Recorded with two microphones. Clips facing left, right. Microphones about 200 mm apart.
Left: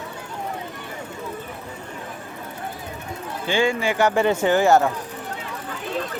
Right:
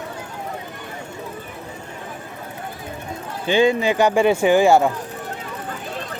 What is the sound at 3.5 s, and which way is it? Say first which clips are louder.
Speech: right 5 dB; 20° right (ahead or behind).